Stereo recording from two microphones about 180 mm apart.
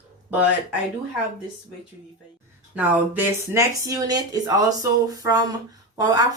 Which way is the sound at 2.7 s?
10° right (ahead or behind).